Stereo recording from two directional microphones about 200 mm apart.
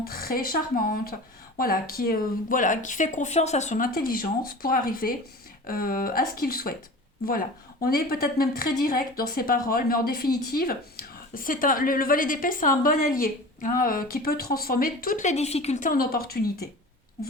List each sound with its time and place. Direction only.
0.0 s a woman's voice: 45° left (ahead or behind)